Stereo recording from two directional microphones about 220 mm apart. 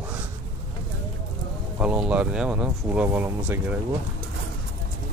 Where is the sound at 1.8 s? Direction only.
5° right (ahead or behind).